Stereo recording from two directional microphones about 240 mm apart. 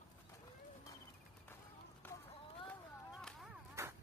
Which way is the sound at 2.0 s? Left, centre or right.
Centre.